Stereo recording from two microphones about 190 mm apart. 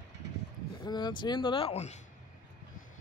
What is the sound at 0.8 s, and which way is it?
Speech, 20° left (ahead or behind).